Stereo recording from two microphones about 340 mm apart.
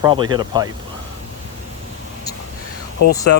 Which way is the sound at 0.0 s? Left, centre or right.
Centre.